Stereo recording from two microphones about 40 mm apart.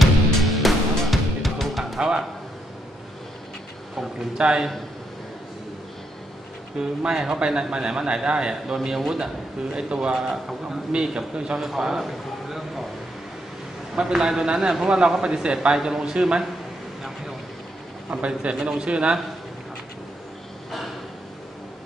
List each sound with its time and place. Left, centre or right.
0.0 s music: centre
2.0 s a sound: centre
3.9 s speech: centre
4.4 s speech: right
6.8 s speech: centre
8.8 s a man's voice: centre
9.2 s speech: right
11.6 s a man's voice: centre
13.9 s a man's voice: centre
18.2 s speech: right